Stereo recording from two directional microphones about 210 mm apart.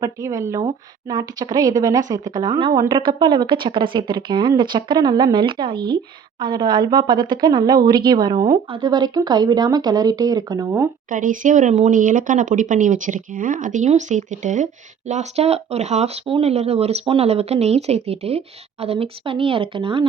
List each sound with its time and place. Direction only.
0.0 s a woman's voice: 15° right (ahead or behind)
11.1 s speech: 40° right (ahead or behind)